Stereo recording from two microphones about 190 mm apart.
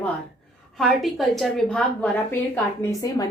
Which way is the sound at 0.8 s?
Centre (ahead or behind).